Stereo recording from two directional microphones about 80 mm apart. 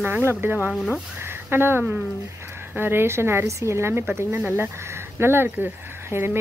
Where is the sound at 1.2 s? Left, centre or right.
Right.